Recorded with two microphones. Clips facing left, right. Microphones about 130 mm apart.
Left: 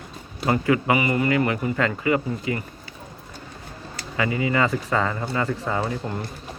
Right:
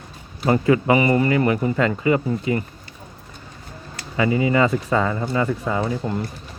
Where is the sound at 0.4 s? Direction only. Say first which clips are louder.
Right 3 dB; 25° right (ahead or behind).